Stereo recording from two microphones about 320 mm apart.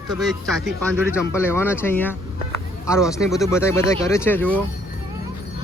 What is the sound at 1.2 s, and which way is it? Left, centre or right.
Speech, centre.